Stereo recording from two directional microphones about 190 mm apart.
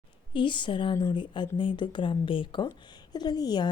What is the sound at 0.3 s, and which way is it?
Speech, 25° left (ahead or behind).